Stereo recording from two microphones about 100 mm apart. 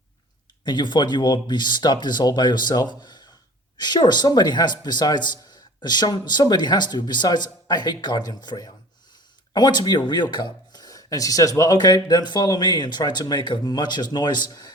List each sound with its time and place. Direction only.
0.6 s speech: 50° left (ahead or behind)